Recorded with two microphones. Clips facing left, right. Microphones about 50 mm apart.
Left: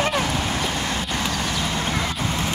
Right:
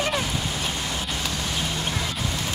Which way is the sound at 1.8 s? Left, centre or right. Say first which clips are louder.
Left 4 dB; left.